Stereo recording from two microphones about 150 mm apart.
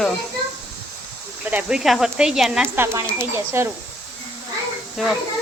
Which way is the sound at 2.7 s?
15° right (ahead or behind).